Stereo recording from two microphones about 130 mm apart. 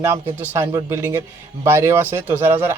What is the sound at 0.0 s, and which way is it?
Speech, 15° right (ahead or behind).